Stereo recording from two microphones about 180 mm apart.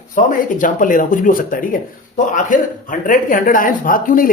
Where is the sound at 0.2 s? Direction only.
45° left (ahead or behind).